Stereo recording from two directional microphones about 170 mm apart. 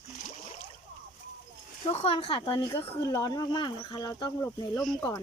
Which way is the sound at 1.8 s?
35° left (ahead or behind).